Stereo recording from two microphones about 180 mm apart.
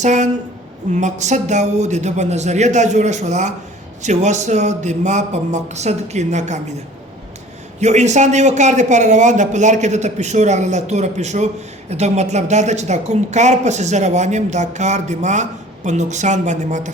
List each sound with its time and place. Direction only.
0.0 s a woman's voice: 40° right (ahead or behind)
7.8 s a woman's voice: 40° right (ahead or behind)